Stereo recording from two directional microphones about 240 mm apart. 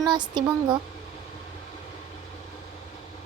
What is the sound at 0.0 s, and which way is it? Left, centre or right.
Speech, centre.